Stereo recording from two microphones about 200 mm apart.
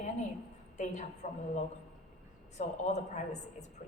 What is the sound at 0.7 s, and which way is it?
A woman's voice, 35° left (ahead or behind).